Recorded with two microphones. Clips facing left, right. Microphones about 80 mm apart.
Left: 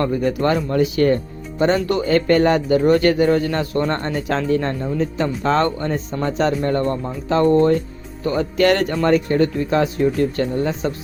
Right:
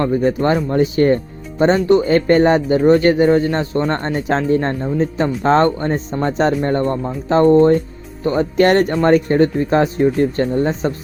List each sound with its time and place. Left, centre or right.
0.0 s speech: right
8.5 s speech: right